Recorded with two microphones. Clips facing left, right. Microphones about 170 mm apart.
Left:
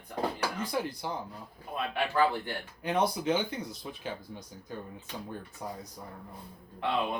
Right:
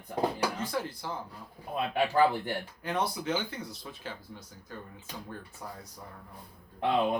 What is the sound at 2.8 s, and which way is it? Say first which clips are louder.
Speech: left 6 dB; 20° left (ahead or behind).